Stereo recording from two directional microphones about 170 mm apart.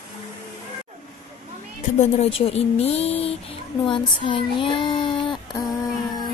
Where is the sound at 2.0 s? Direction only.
35° left (ahead or behind).